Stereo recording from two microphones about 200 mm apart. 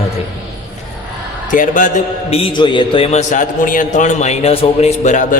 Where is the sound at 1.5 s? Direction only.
40° left (ahead or behind).